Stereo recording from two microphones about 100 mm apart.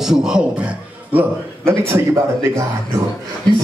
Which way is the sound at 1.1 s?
25° right (ahead or behind).